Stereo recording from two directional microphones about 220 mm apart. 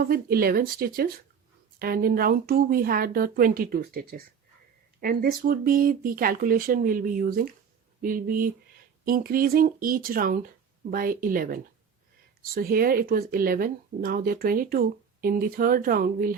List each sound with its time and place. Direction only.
0.0 s speech: 40° right (ahead or behind)